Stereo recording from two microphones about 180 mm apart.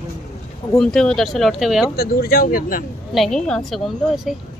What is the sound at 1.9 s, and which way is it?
Speech, 60° left (ahead or behind).